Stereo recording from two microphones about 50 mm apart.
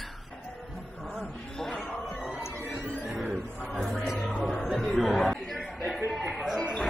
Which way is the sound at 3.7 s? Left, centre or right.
Centre.